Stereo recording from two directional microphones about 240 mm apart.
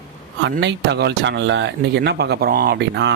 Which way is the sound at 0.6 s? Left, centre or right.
Right.